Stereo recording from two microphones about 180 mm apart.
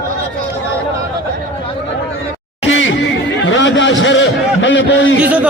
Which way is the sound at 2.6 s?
90° left.